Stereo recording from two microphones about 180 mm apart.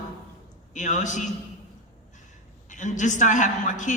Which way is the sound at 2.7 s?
45° left (ahead or behind).